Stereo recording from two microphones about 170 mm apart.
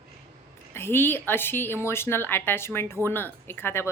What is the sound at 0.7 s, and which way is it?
Speech, 15° left (ahead or behind).